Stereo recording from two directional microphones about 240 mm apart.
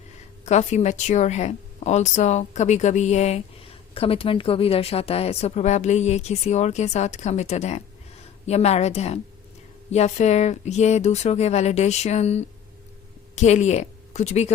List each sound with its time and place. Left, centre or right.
0.4 s a woman's voice: left